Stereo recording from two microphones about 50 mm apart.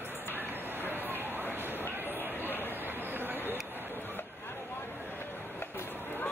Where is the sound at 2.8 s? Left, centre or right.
Right.